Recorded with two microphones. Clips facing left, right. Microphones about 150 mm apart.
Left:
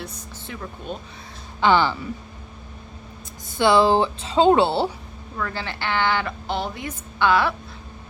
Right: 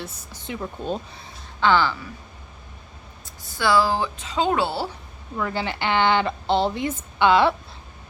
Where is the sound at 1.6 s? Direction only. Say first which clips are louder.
Left 1 dB; 20° left (ahead or behind).